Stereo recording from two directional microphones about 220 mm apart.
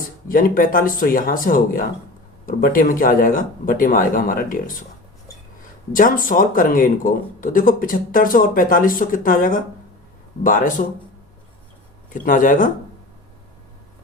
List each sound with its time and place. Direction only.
0.3 s speech: 40° left (ahead or behind)
5.9 s speech: 40° left (ahead or behind)
12.1 s speech: 35° left (ahead or behind)